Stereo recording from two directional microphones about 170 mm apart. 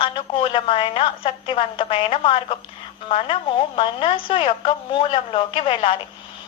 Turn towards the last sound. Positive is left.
turn(degrees=30)  # may be behind; listen again after turning